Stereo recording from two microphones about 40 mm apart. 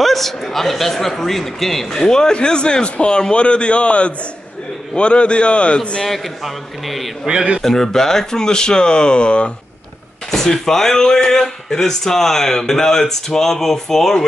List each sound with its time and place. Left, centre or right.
0.0 s speech: centre; by 5.8 s left
6.0 s a man's voice: centre
7.2 s a man's voice: right
7.6 s speech: centre; by 9.5 s left
10.3 s speech: centre